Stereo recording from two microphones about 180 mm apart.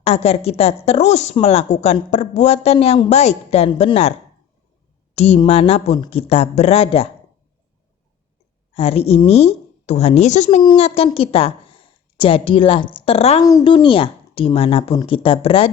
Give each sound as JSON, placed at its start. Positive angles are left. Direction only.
{"t": 0.0, "sound": "a woman's voice", "side_deg": 35}
{"t": 5.1, "sound": "a woman's voice", "side_deg": 35}
{"t": 8.7, "sound": "a woman's voice", "side_deg": 35}
{"t": 10.6, "sound": "a woman's voice", "side_deg": 30}
{"t": 13.4, "sound": "speech", "side_deg": 20}
{"t": 13.7, "sound": "a woman's voice", "side_deg": 30}